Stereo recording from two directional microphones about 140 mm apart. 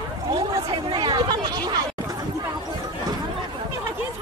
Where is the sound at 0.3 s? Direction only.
35° right (ahead or behind).